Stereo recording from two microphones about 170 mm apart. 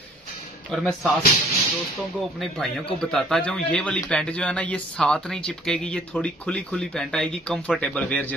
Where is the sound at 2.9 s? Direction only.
Centre (ahead or behind).